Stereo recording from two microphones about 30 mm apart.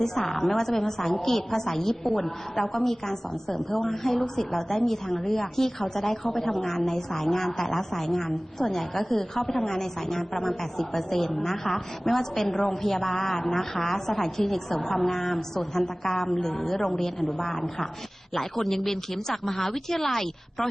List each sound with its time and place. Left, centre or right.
0.0 s a woman's voice: centre